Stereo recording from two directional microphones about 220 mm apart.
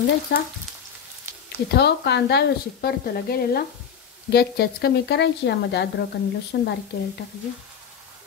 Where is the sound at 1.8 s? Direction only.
50° left (ahead or behind).